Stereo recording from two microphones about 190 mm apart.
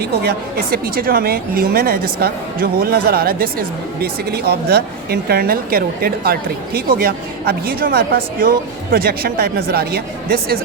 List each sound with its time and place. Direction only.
0.2 s a woman's voice: 55° right (ahead or behind)